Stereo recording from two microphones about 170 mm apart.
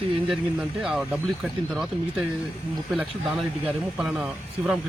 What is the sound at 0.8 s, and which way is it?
Speech, 5° right (ahead or behind).